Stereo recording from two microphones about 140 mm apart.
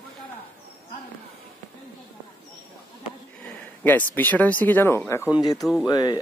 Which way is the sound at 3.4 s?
15° left (ahead or behind).